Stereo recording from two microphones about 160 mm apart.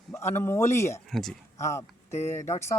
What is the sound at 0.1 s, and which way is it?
Speech, 15° left (ahead or behind).